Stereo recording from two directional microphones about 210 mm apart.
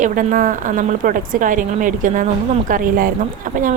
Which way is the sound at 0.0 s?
40° right (ahead or behind).